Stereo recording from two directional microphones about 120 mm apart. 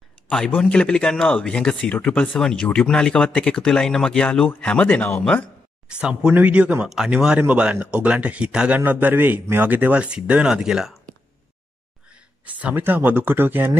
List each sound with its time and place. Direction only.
0.3 s a man's voice: 5° left (ahead or behind)
5.9 s speech: 10° right (ahead or behind)
12.1 s speech: 10° right (ahead or behind)